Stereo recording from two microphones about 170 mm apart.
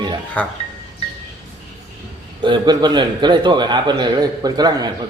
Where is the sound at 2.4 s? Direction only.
25° right (ahead or behind).